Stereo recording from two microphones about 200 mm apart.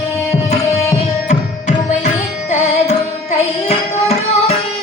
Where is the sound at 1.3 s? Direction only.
35° left (ahead or behind).